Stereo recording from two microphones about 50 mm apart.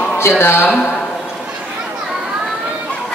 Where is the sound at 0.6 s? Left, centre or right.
Left.